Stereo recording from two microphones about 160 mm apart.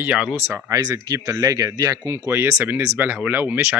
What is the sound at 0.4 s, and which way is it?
Speech, 15° right (ahead or behind).